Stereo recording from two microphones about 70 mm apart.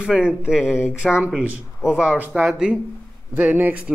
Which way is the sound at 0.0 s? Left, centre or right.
Centre.